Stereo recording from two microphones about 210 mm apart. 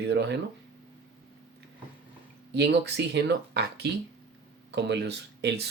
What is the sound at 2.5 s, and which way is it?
Speech, 55° right (ahead or behind).